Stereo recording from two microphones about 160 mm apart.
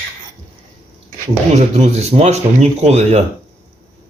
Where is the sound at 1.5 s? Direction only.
45° right (ahead or behind).